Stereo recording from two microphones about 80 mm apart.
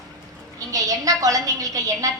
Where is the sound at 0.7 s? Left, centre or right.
Right.